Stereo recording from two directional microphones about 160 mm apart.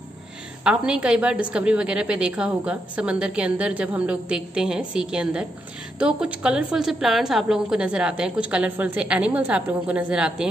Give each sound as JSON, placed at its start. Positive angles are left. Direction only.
{"t": 0.7, "sound": "a woman's voice", "side_deg": -5}